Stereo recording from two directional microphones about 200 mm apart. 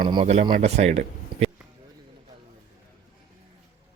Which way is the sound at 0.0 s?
25° right (ahead or behind).